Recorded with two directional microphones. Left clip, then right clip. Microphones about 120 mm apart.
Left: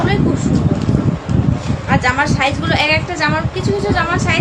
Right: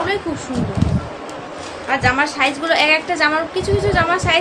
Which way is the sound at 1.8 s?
15° right (ahead or behind).